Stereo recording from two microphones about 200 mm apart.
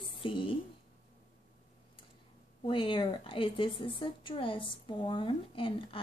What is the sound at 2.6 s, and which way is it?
A woman's voice, 25° left (ahead or behind).